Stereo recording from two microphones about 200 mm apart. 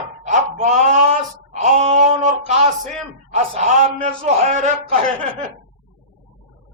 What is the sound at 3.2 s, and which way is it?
Speech, 35° right (ahead or behind).